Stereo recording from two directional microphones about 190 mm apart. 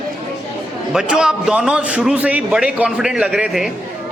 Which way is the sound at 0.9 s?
5° right (ahead or behind).